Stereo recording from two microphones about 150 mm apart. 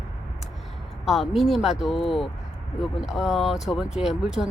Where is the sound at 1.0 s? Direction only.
Centre (ahead or behind).